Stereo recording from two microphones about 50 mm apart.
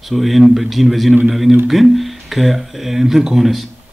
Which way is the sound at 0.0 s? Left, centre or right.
Centre.